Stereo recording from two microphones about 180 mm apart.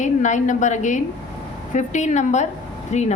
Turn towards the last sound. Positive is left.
turn(degrees=40)  # may be behind; listen again after turning